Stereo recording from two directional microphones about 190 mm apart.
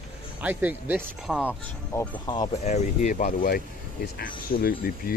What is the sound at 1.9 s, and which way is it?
Speech, 20° left (ahead or behind).